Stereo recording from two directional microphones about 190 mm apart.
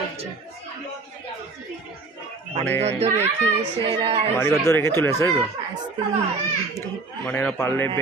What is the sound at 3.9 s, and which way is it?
Speech, 25° right (ahead or behind).